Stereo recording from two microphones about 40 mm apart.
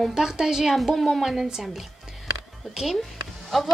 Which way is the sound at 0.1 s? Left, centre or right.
Centre.